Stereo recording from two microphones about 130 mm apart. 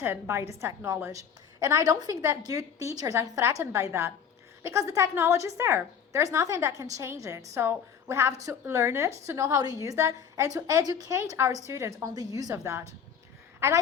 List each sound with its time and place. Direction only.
0.0 s a woman's voice: 15° right (ahead or behind)